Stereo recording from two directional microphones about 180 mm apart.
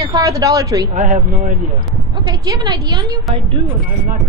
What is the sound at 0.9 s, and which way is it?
Speech, 45° right (ahead or behind).